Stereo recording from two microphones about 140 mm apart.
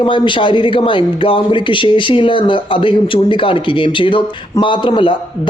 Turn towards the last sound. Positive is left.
turn(degrees=35)  # may be behind; listen again after turning